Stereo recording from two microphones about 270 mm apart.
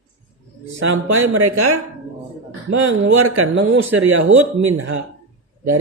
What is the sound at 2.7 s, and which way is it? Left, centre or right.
Speech, right.